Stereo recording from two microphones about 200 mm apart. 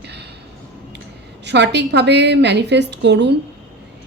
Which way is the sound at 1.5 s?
60° right (ahead or behind).